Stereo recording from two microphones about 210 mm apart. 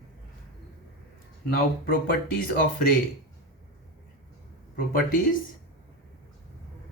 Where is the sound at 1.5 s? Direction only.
45° left (ahead or behind).